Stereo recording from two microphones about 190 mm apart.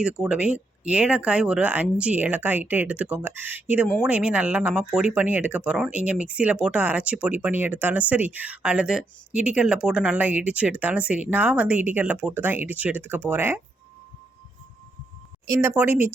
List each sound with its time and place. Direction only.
0.0 s speech: 5° right (ahead or behind)
15.4 s speech: 10° right (ahead or behind)